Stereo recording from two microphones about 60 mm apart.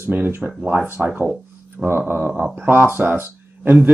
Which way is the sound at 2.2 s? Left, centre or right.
Right.